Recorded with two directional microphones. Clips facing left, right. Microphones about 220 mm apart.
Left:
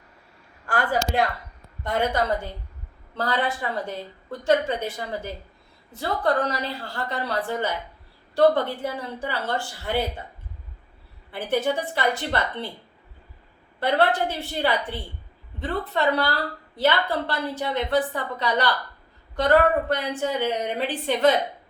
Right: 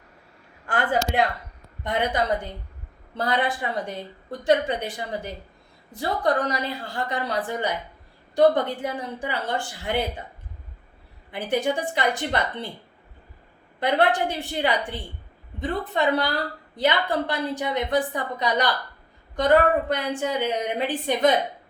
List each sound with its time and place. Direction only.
0.7 s a woman's voice: 20° right (ahead or behind)
11.3 s a woman's voice: 15° right (ahead or behind)
13.7 s a woman's voice: 15° right (ahead or behind)